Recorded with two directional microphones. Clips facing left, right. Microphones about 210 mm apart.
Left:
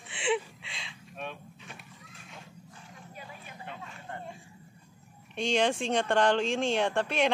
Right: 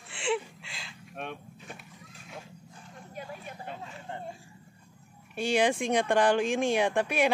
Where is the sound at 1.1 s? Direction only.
55° right (ahead or behind).